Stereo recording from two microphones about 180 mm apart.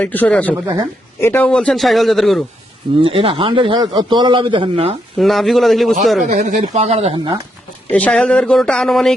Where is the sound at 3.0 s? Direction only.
30° right (ahead or behind).